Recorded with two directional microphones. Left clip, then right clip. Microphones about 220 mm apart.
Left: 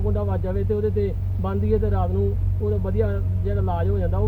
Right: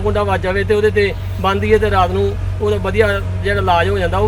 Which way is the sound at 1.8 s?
45° right (ahead or behind).